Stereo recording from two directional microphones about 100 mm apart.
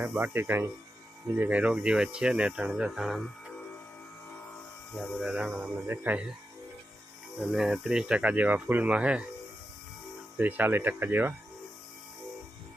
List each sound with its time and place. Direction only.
0.1 s speech: 20° right (ahead or behind); by 3.5 s 5° right (ahead or behind)
4.9 s speech: 15° left (ahead or behind)
5.2 s speech: 10° right (ahead or behind)
7.3 s speech: 5° right (ahead or behind)
10.3 s speech: 20° right (ahead or behind)